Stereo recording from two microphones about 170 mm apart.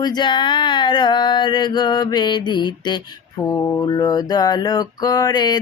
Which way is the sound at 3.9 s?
25° left (ahead or behind).